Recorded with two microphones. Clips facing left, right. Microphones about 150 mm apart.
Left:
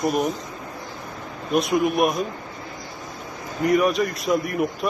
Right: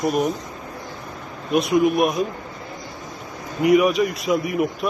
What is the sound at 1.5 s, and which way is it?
Speech, centre (ahead or behind).